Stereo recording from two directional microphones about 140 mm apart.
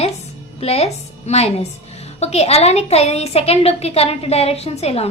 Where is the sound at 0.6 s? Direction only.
45° left (ahead or behind).